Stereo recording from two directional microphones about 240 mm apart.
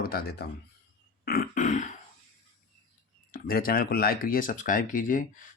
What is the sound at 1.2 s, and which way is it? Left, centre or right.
Burping, left.